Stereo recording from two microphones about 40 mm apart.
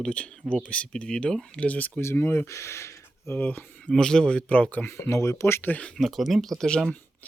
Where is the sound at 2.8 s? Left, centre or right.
Left.